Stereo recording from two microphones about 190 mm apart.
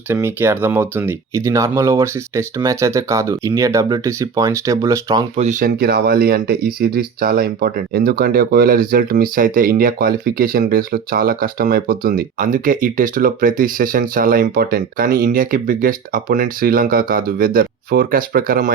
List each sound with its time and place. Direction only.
0.1 s speech: 10° right (ahead or behind)
5.4 s speech: 40° right (ahead or behind)